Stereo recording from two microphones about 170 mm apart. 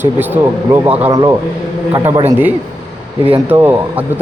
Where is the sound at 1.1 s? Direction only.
20° right (ahead or behind).